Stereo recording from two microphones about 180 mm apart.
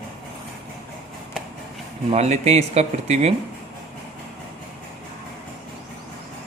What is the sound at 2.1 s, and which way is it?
Speech, 40° right (ahead or behind).